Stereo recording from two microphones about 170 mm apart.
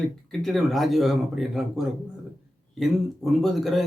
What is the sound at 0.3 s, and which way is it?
Speech, centre (ahead or behind).